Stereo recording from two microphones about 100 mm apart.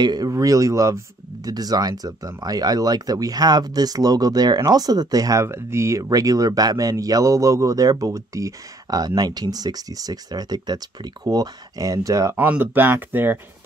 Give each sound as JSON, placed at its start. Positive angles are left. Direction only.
{"t": 0.0, "sound": "speech", "side_deg": -40}
{"t": 12.4, "sound": "speech", "side_deg": -20}